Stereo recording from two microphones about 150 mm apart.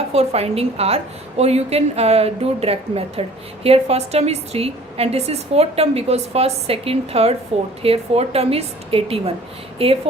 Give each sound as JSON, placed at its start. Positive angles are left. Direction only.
{"t": 0.1, "sound": "a woman's voice", "side_deg": -45}